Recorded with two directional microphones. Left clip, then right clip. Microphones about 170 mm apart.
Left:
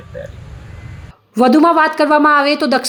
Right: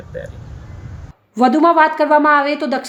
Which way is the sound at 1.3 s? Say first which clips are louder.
Left 1 dB; 15° left (ahead or behind).